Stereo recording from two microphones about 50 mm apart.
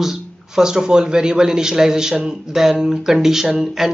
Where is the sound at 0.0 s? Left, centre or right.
Centre.